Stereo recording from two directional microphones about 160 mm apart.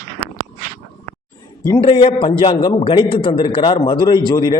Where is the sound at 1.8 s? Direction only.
35° left (ahead or behind).